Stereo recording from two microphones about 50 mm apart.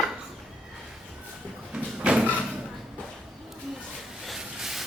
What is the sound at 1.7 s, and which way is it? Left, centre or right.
Sliding door, right.